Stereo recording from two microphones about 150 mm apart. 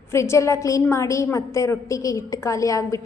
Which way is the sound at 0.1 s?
20° left (ahead or behind).